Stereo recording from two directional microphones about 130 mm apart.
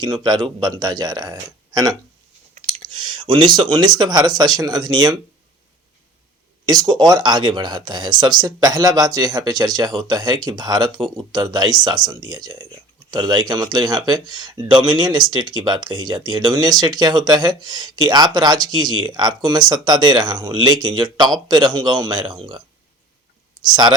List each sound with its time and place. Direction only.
0.0 s speech: 35° right (ahead or behind)
6.7 s speech: 30° right (ahead or behind)
23.6 s speech: 35° right (ahead or behind)